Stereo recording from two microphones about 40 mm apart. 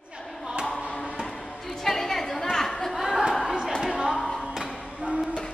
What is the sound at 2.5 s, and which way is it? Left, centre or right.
Chatter, centre.